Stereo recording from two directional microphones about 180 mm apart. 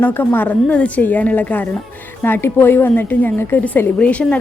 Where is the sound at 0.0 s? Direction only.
10° left (ahead or behind).